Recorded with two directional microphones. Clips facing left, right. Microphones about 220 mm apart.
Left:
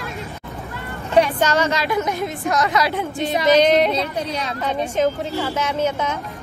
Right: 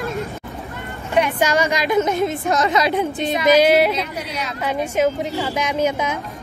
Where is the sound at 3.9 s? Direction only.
30° left (ahead or behind).